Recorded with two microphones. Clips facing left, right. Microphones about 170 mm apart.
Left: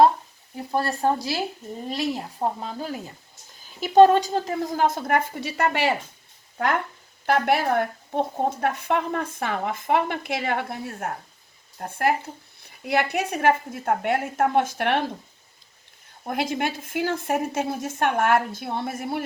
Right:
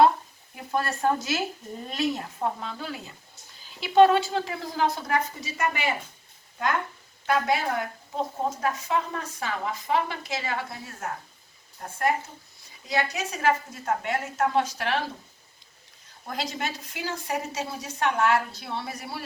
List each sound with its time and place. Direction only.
0.5 s frying: 30° left (ahead or behind)
1.0 s a woman's voice: 35° left (ahead or behind); by 5.2 s 50° left (ahead or behind)
5.3 s speech: 60° left (ahead or behind)
7.3 s speech: 65° left (ahead or behind)
16.2 s a woman's voice: 55° left (ahead or behind)